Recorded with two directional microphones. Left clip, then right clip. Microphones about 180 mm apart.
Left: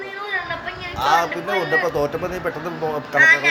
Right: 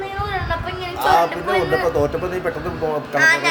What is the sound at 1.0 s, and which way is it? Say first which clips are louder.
Speech: right 2 dB; 5° left (ahead or behind).